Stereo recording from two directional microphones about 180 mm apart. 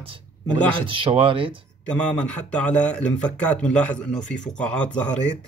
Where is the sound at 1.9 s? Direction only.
5° left (ahead or behind).